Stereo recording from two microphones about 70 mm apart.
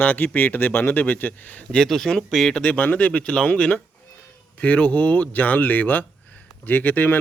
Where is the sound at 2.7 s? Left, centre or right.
Left.